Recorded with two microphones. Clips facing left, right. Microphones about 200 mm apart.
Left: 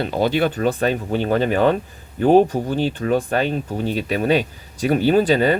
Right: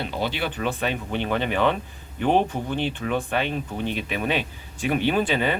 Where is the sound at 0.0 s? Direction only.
45° left (ahead or behind).